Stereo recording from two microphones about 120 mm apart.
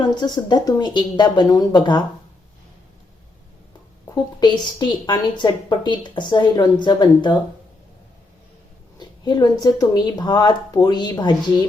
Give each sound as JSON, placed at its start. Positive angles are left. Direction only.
{"t": 0.0, "sound": "a woman's voice", "side_deg": 35}
{"t": 4.1, "sound": "a woman's voice", "side_deg": 35}
{"t": 9.0, "sound": "a woman's voice", "side_deg": 35}